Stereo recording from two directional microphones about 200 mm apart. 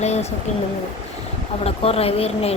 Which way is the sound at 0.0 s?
35° left (ahead or behind).